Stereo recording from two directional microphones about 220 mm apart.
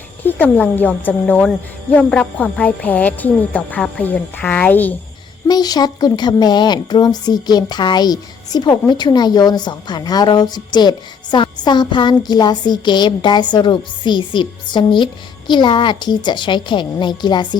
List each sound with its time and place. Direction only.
0.3 s a woman's voice: 10° left (ahead or behind)